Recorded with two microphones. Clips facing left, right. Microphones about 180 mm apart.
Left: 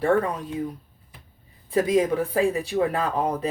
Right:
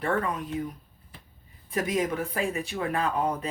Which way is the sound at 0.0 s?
35° left (ahead or behind).